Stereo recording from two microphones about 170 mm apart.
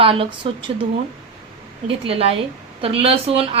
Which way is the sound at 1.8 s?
35° right (ahead or behind).